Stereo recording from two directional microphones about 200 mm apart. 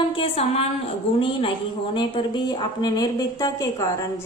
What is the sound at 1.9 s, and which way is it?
A woman's voice, 20° left (ahead or behind).